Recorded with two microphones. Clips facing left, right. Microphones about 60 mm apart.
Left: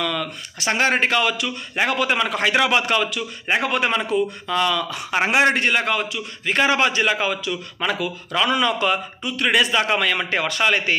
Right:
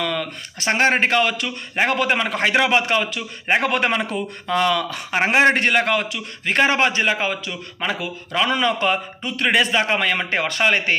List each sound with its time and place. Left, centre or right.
0.0 s a man's voice: right
5.1 s a man's voice: right
5.6 s a man's voice: right